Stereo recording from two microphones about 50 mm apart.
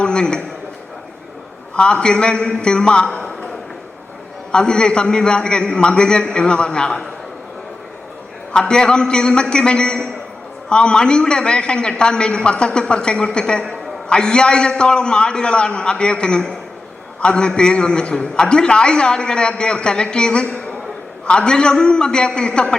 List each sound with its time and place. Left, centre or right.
0.0 s a sound: centre
1.7 s a man's voice: centre
4.5 s a man's voice: centre
8.5 s a man's voice: centre